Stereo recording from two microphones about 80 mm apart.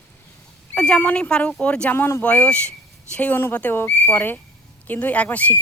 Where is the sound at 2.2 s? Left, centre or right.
Centre.